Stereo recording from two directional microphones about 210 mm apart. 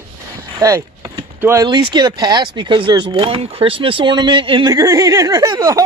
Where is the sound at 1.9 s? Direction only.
20° right (ahead or behind).